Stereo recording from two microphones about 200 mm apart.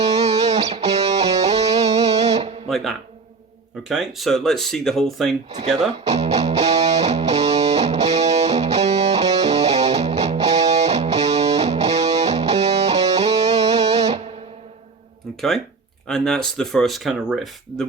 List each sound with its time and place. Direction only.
0.0 s music: 35° right (ahead or behind)
2.6 s music: centre (ahead or behind)
3.8 s speech: centre (ahead or behind)
6.1 s music: 35° right (ahead or behind)
15.4 s speech: centre (ahead or behind)